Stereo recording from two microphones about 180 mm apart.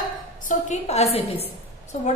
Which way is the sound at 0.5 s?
40° left (ahead or behind).